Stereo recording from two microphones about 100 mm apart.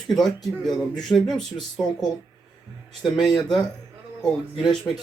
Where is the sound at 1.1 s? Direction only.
5° left (ahead or behind).